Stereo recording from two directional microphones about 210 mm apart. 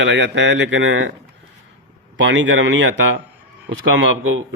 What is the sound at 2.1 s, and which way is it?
Speech, 60° right (ahead or behind).